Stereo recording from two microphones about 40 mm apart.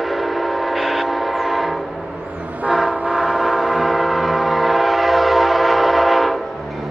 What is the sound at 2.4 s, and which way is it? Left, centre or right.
Vehicle, right.